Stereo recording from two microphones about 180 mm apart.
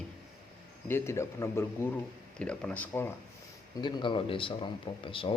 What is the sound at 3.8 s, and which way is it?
Speech, 25° left (ahead or behind).